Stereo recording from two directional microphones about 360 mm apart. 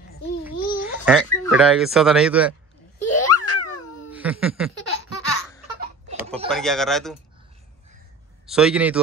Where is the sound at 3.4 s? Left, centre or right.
Left.